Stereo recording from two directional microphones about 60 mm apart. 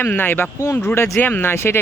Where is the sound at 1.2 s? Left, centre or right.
Left.